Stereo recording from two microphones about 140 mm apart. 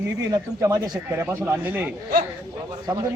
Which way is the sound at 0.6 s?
20° right (ahead or behind).